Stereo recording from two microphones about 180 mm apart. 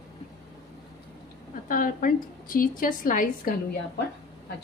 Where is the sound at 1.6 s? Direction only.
50° left (ahead or behind).